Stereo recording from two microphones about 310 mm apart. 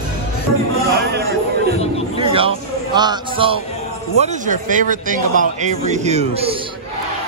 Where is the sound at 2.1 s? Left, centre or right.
Centre.